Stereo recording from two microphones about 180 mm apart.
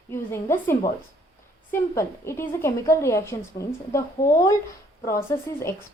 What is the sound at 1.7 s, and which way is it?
Speech, 15° left (ahead or behind).